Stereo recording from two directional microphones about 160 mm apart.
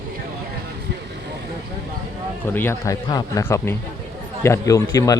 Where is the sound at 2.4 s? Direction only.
15° left (ahead or behind).